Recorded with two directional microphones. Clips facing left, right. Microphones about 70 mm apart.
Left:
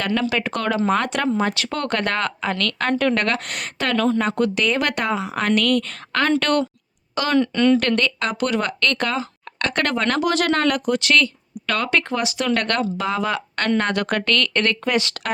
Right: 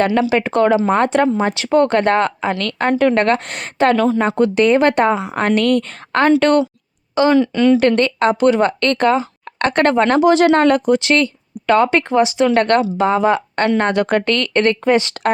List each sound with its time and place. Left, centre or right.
0.1 s speech: right
3.9 s speech: centre
4.2 s speech: right
7.3 s speech: centre
7.8 s speech: right